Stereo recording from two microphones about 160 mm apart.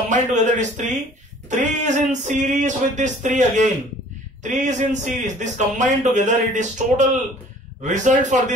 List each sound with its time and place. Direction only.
0.1 s speech: 50° right (ahead or behind)